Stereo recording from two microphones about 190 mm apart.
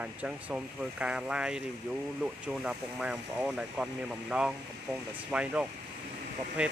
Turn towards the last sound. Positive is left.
turn(degrees=-5)  # may be behind; listen again after turning